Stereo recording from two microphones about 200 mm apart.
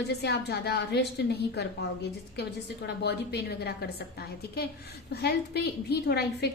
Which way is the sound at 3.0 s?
55° left (ahead or behind).